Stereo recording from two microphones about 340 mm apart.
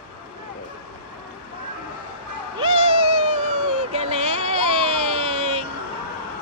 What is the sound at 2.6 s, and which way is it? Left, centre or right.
Cat, centre.